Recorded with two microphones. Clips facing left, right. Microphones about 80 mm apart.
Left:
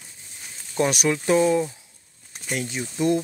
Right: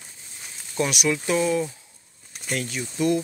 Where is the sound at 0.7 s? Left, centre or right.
Left.